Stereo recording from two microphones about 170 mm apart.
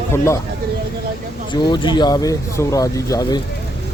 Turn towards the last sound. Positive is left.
turn(degrees=20)  # may be behind; listen again after turning